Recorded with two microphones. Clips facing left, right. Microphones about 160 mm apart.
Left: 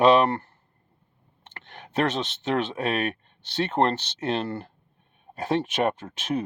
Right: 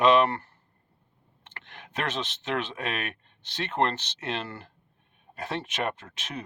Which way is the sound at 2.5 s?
40° left (ahead or behind).